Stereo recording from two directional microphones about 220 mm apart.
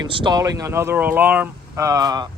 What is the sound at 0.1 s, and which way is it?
Speech, 20° right (ahead or behind).